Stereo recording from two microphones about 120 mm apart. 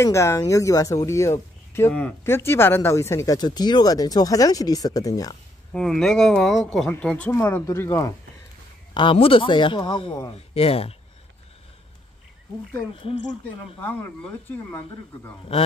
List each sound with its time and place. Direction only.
0.0 s speech: 25° left (ahead or behind)
3.3 s speech: 35° left (ahead or behind)
5.7 s speech: 5° left (ahead or behind); by 8.1 s 25° left (ahead or behind)
8.9 s a man's voice: 45° left (ahead or behind)
12.9 s a man's voice: 50° left (ahead or behind)
13.7 s speech: 15° left (ahead or behind)